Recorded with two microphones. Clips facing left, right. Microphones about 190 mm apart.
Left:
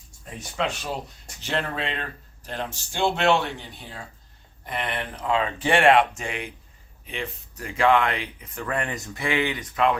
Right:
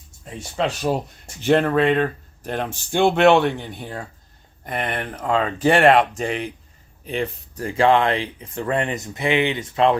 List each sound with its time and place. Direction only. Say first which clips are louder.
0.3 s speech: right 4 dB; 35° right (ahead or behind)
1.4 s speech: right 12 dB; 55° right (ahead or behind); by 10.0 s 30° right (ahead or behind)